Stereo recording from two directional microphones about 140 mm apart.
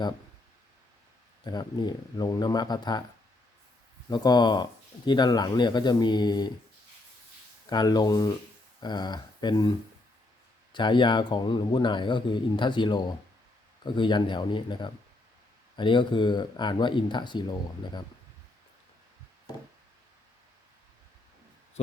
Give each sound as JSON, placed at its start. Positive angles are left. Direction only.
{"t": 1.5, "sound": "speech", "side_deg": 30}
{"t": 4.1, "sound": "speech", "side_deg": 30}
{"t": 7.7, "sound": "speech", "side_deg": 30}